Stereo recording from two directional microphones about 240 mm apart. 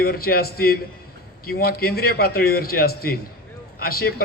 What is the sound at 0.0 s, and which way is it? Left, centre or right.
A man's voice, left.